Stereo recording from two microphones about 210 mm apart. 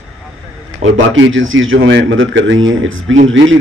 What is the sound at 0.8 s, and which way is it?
A man's voice, 65° right (ahead or behind).